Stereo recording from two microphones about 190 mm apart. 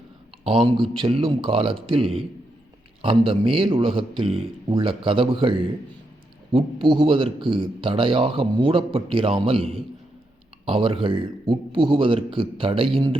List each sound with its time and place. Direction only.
0.4 s speech: 25° right (ahead or behind)